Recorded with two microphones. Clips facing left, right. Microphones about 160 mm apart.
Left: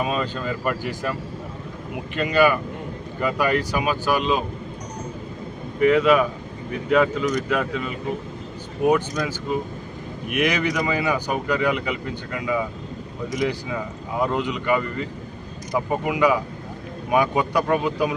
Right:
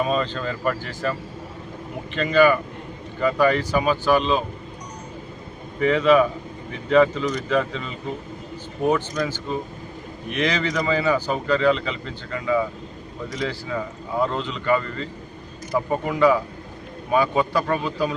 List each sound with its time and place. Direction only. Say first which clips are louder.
0.0 s speech: right 2 dB; 5° left (ahead or behind)
2.1 s speech: right 2 dB; 10° left (ahead or behind)
5.8 s speech: even; 10° left (ahead or behind)